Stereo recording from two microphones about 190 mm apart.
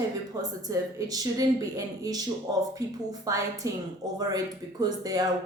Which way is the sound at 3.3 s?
15° right (ahead or behind).